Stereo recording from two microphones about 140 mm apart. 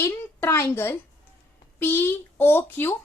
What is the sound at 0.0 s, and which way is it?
Speech, 20° left (ahead or behind).